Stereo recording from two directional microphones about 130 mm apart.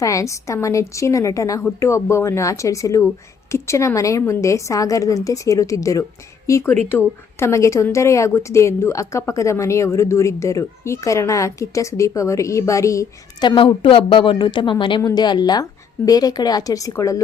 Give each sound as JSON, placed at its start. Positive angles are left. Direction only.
{"t": 0.0, "sound": "a woman's voice", "side_deg": 25}
{"t": 13.6, "sound": "a woman's voice", "side_deg": 40}